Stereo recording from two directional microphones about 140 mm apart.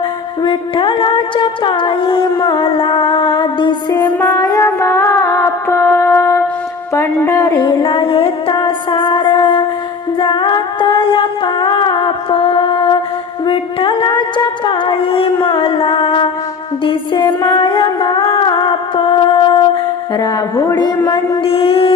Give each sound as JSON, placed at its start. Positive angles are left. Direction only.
{"t": 0.4, "sound": "humming", "side_deg": 35}
{"t": 4.4, "sound": "music", "side_deg": 25}
{"t": 13.4, "sound": "a sound", "side_deg": 35}
{"t": 16.8, "sound": "music", "side_deg": 35}
{"t": 20.1, "sound": "humming", "side_deg": 25}